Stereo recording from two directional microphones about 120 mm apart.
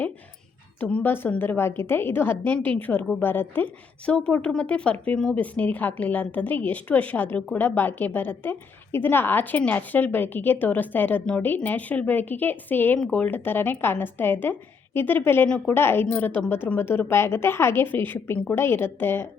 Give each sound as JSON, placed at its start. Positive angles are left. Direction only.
{"t": 0.8, "sound": "a woman's voice", "side_deg": 10}